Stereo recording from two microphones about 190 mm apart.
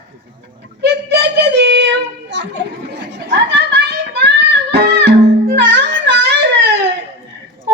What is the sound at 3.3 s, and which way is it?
Music, 65° right (ahead or behind).